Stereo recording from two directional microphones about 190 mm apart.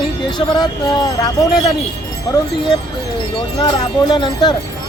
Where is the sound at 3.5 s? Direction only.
25° left (ahead or behind).